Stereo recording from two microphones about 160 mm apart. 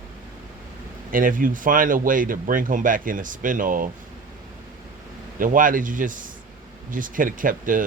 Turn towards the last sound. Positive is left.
turn(degrees=-55)  # may be behind; listen again after turning